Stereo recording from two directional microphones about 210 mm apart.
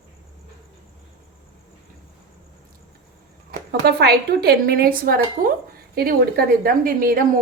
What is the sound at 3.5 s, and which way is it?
Speech, 50° right (ahead or behind).